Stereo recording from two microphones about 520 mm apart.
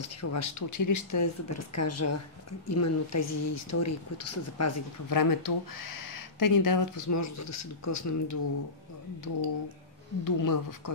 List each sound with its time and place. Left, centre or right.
0.0 s speech: left